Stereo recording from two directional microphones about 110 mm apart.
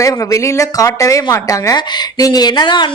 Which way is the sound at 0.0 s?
30° left (ahead or behind).